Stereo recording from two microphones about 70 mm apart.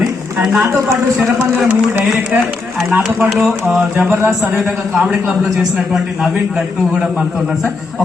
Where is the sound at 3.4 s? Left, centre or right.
Centre.